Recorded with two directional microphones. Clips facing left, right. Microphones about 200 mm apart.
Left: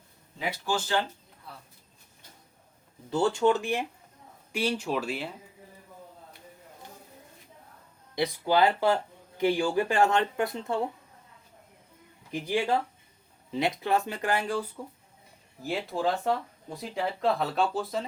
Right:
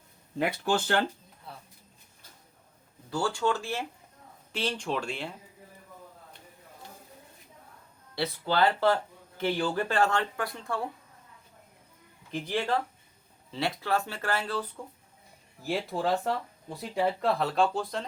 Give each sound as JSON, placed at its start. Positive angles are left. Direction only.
{"t": 0.3, "sound": "speech", "side_deg": -60}
{"t": 3.1, "sound": "speech", "side_deg": 20}
{"t": 8.1, "sound": "speech", "side_deg": 15}
{"t": 12.3, "sound": "speech", "side_deg": 10}
{"t": 15.6, "sound": "speech", "side_deg": 0}